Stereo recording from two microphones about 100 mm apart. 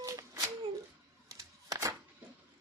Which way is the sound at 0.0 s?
35° right (ahead or behind).